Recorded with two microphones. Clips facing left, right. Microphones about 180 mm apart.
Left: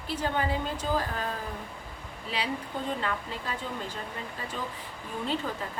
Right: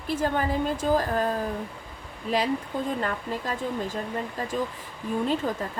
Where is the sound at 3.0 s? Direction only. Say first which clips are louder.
Right 4 dB; 45° right (ahead or behind).